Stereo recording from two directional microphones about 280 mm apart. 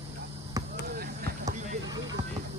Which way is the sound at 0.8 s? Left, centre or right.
Right.